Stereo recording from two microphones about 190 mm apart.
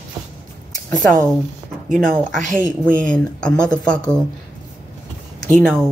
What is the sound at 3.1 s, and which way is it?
Speech, 5° left (ahead or behind).